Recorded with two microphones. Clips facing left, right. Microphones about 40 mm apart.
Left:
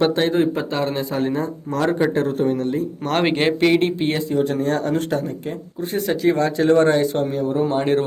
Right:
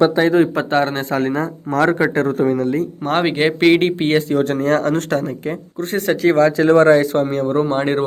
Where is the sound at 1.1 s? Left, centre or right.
Right.